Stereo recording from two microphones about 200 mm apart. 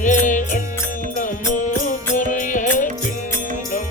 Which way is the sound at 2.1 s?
40° left (ahead or behind).